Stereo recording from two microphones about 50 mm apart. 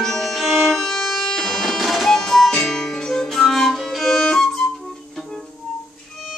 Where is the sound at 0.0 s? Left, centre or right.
Centre.